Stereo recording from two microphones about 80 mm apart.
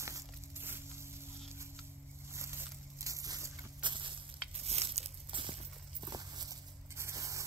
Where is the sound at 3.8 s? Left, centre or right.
Right.